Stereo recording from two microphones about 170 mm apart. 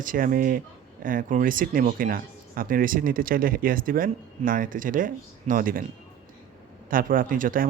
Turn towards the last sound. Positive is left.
turn(degrees=-55)  # may be behind; listen again after turning